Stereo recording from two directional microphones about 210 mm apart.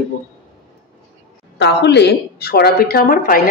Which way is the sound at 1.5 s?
55° left (ahead or behind).